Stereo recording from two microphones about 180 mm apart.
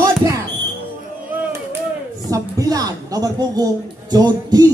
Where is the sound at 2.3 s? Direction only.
20° right (ahead or behind).